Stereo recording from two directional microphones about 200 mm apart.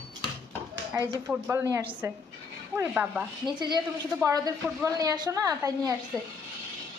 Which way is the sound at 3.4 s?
20° right (ahead or behind).